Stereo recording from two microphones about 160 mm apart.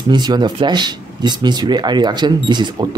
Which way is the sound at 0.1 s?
25° right (ahead or behind).